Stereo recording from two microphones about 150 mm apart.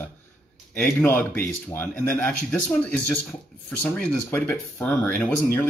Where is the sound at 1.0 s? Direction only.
10° left (ahead or behind).